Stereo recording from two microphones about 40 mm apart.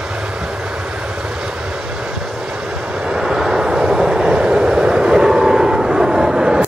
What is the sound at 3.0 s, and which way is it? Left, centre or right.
Vehicle, centre.